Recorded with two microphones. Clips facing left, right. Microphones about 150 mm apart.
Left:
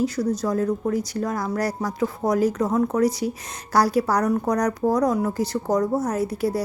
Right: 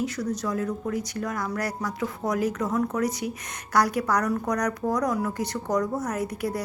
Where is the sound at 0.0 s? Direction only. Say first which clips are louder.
Left 5 dB; 35° left (ahead or behind).